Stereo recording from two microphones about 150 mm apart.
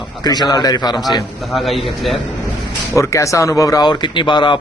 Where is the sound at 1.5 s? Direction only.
Centre (ahead or behind).